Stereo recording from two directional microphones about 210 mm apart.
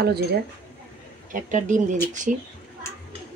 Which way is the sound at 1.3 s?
35° right (ahead or behind).